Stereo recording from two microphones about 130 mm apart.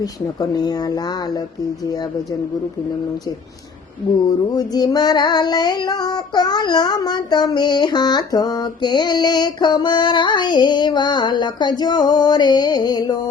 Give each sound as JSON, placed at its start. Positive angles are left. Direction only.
{"t": 0.0, "sound": "speech", "side_deg": 30}
{"t": 4.3, "sound": "music", "side_deg": 30}